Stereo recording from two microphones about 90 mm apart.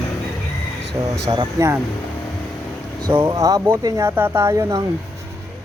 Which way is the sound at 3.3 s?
40° right (ahead or behind).